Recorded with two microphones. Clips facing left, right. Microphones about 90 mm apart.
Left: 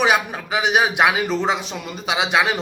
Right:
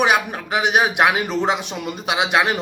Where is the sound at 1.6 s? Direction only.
60° right (ahead or behind).